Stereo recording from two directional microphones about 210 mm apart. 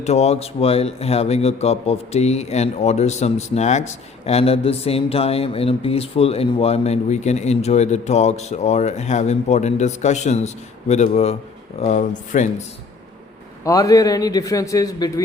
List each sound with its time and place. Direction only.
0.0 s a man's voice: 30° left (ahead or behind)
13.7 s a man's voice: 15° left (ahead or behind)